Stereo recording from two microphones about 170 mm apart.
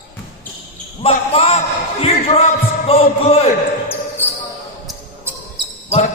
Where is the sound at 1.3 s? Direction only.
35° left (ahead or behind).